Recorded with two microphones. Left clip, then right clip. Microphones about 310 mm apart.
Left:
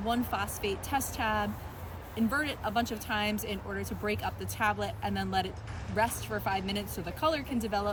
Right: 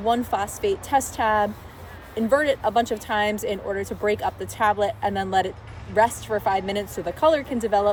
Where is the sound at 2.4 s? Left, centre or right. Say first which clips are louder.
Right 11 dB; right.